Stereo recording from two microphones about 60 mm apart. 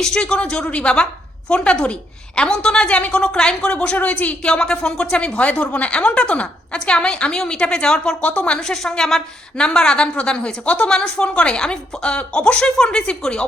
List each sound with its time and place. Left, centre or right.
0.0 s a woman's voice: centre